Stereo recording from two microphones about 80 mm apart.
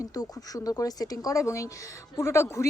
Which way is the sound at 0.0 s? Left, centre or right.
Left.